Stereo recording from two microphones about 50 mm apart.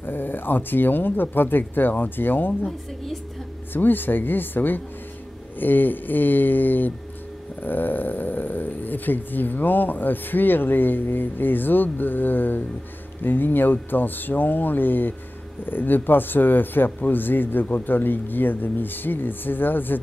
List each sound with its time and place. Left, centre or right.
0.0 s speech: left
3.7 s speech: left